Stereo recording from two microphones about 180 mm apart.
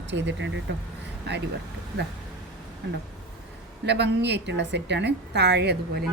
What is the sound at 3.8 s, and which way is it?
A woman's voice, 70° right (ahead or behind).